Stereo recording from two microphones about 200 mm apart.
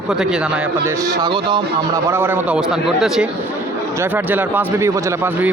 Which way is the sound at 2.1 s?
10° right (ahead or behind).